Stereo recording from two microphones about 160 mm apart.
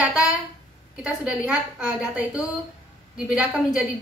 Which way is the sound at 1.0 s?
10° right (ahead or behind).